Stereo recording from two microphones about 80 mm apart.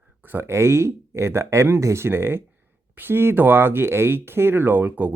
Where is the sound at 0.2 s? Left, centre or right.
Right.